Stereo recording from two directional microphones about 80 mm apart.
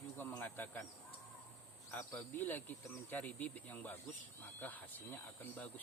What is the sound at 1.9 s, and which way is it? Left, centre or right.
Cricket, left.